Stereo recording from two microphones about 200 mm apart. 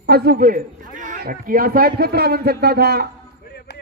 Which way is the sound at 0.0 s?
50° right (ahead or behind).